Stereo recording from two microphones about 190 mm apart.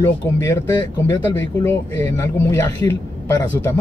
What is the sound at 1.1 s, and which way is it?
Speech, 10° left (ahead or behind).